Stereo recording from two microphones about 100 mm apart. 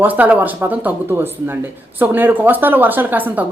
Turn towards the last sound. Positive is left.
turn(degrees=-20)  # may be behind; listen again after turning